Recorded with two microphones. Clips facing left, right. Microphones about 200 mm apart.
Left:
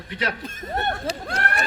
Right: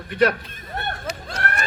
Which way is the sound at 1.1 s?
30° left (ahead or behind).